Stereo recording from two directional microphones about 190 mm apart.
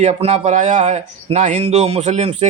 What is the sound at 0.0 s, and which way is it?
Speech, 35° right (ahead or behind).